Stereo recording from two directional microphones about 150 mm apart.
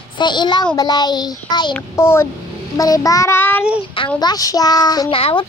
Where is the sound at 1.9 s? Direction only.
15° left (ahead or behind).